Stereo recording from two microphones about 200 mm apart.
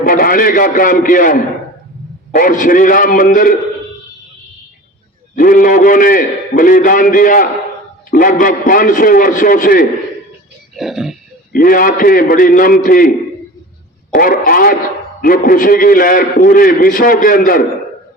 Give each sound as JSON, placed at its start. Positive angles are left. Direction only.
{"t": 0.0, "sound": "a man's voice", "side_deg": 45}
{"t": 5.4, "sound": "a man's voice", "side_deg": 45}
{"t": 10.8, "sound": "a sound", "side_deg": 0}
{"t": 11.5, "sound": "a man's voice", "side_deg": 45}
{"t": 14.1, "sound": "a man's voice", "side_deg": 45}